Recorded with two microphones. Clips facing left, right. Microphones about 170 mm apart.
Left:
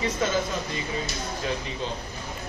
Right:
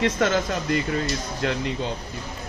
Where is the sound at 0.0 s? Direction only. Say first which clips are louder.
Right 4 dB; 75° right (ahead or behind).